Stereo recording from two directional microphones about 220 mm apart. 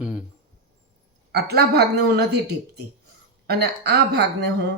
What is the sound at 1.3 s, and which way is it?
Speech, 45° right (ahead or behind).